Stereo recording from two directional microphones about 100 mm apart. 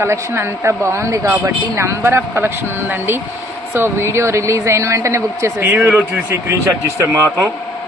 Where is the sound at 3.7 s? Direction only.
25° right (ahead or behind).